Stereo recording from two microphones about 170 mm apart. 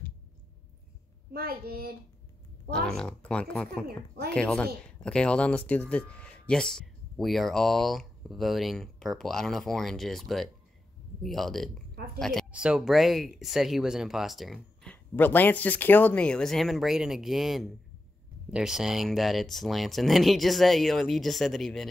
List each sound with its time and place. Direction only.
1.3 s a child's voice: 65° right (ahead or behind)
2.7 s speech: 5° left (ahead or behind)